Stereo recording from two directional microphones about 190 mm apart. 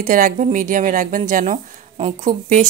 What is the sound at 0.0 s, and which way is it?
A woman's voice, 45° right (ahead or behind).